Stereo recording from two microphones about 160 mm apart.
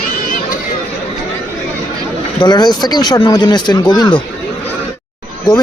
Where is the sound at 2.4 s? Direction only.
25° left (ahead or behind).